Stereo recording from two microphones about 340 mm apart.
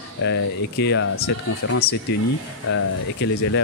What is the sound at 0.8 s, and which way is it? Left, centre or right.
Speech, left.